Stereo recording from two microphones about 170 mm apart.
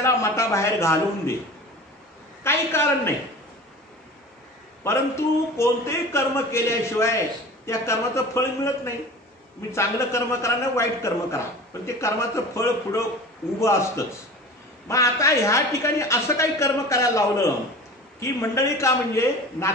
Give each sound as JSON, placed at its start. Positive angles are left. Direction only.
{"t": 0.0, "sound": "a man's voice", "side_deg": 15}
{"t": 2.4, "sound": "a man's voice", "side_deg": 15}
{"t": 4.8, "sound": "a man's voice", "side_deg": 15}